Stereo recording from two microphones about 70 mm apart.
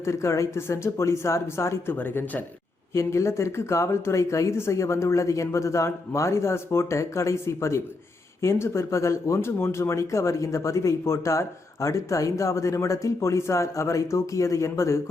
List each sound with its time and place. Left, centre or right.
0.0 s speech: left
1.9 s speech: left
2.9 s speech: left